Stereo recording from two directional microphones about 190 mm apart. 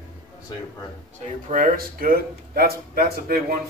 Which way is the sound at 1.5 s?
50° right (ahead or behind).